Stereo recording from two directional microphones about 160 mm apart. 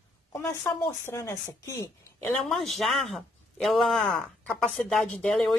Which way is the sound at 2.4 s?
Centre (ahead or behind).